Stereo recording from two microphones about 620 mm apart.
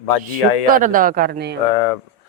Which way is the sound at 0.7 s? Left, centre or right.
Centre.